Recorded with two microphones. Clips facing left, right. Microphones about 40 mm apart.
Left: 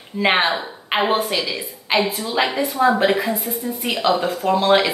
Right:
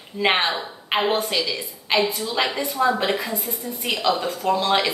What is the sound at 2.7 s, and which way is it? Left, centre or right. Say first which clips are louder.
Speech: left 5 dB; left.